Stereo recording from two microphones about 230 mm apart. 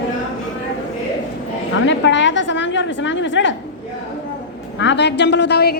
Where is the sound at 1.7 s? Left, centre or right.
Left.